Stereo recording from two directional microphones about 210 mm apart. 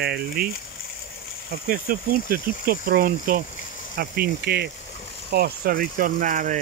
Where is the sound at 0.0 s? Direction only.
50° right (ahead or behind).